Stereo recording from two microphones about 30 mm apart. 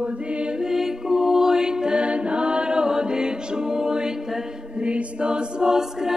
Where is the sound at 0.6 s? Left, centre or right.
Centre.